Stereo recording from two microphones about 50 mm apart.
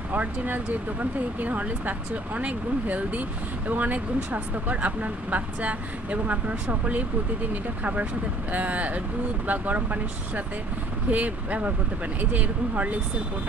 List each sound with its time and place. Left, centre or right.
0.1 s speech: right